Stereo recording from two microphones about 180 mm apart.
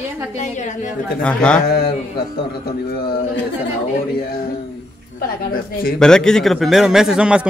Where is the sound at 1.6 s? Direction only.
60° left (ahead or behind).